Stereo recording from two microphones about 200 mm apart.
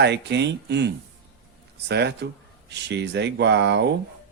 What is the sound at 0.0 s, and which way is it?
Speech, 60° right (ahead or behind).